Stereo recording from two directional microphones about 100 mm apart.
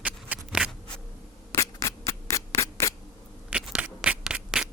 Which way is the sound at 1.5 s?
30° left (ahead or behind).